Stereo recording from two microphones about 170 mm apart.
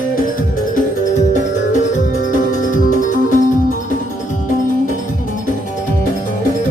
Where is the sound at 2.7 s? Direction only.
50° left (ahead or behind).